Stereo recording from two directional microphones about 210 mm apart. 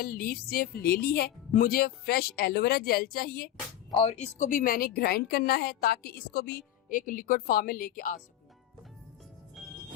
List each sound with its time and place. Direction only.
0.0 s a woman's voice: 45° left (ahead or behind)
3.9 s a woman's voice: 30° left (ahead or behind)
9.6 s music: centre (ahead or behind)